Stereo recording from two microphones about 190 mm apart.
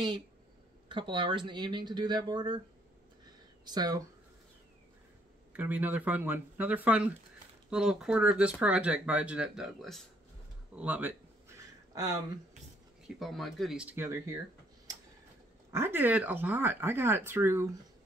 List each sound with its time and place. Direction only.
0.8 s speech: 25° right (ahead or behind)
3.6 s speech: 20° right (ahead or behind)
5.6 s speech: 10° right (ahead or behind)
10.8 s a sound: 10° right (ahead or behind)
13.2 s speech: centre (ahead or behind); by 14.4 s 15° right (ahead or behind)
15.7 s speech: 10° right (ahead or behind)